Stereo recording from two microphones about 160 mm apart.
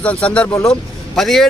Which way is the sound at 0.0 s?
10° left (ahead or behind).